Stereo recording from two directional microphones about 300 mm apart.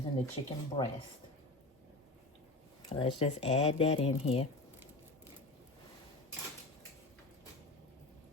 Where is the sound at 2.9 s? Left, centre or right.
Centre.